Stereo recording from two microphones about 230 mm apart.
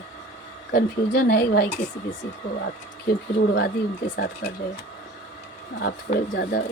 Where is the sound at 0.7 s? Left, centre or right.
Left.